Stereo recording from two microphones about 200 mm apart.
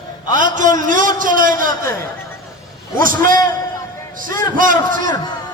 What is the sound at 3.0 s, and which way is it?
Speech, 45° right (ahead or behind).